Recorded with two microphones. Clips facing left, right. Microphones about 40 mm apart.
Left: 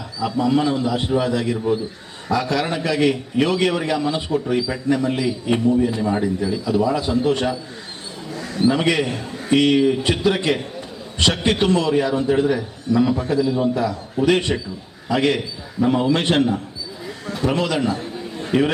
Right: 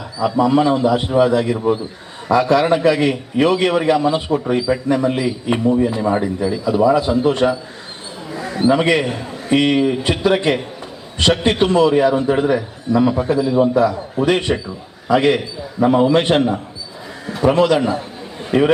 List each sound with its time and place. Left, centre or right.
0.2 s a man's voice: centre
17.4 s a man's voice: right
17.7 s chatter: centre